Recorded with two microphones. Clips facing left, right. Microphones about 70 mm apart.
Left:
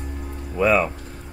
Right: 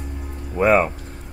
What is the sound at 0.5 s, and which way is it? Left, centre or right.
Speech, right.